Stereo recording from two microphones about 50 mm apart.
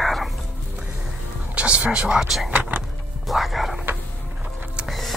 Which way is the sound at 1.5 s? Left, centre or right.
Right.